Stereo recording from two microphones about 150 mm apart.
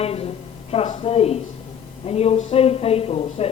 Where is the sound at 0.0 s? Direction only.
40° left (ahead or behind).